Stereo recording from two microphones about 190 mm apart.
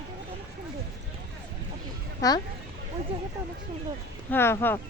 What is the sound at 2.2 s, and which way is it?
Speech, 15° left (ahead or behind).